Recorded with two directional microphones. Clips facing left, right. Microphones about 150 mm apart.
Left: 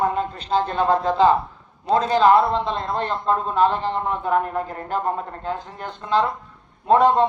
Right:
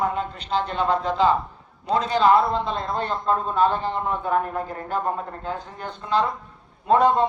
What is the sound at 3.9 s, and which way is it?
Speech, 25° left (ahead or behind).